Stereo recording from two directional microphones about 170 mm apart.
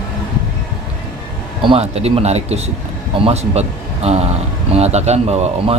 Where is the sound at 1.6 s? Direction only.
35° right (ahead or behind).